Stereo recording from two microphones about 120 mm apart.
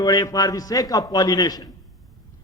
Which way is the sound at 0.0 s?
35° left (ahead or behind).